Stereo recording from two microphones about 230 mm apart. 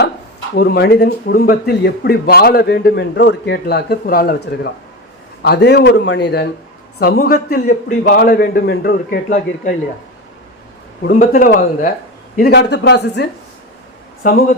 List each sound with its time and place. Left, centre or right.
0.5 s a man's voice: left
11.0 s a man's voice: left
12.4 s a man's voice: left